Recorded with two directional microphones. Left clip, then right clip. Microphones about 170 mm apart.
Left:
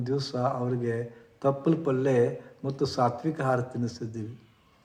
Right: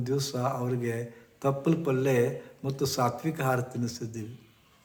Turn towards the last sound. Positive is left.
turn(degrees=-15)  # may be behind; listen again after turning